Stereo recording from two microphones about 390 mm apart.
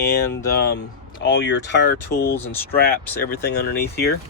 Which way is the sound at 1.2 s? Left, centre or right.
Left.